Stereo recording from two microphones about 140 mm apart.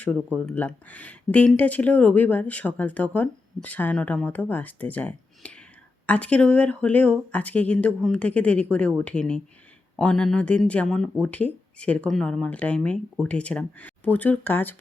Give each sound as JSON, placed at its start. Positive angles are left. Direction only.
{"t": 0.4, "sound": "speech", "side_deg": 10}